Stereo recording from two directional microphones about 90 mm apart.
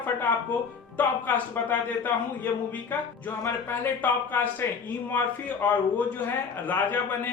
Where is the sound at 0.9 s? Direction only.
20° left (ahead or behind).